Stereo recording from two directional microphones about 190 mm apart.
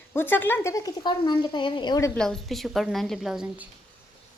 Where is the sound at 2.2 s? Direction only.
Centre (ahead or behind).